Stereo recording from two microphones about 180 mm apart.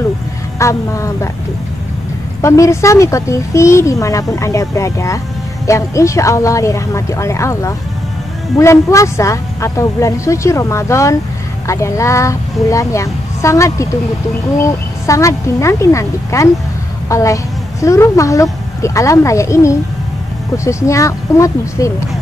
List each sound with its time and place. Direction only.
0.6 s speech: 15° left (ahead or behind)
2.4 s a woman's voice: 15° left (ahead or behind)